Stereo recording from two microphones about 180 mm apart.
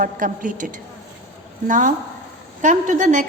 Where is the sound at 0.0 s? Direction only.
50° right (ahead or behind).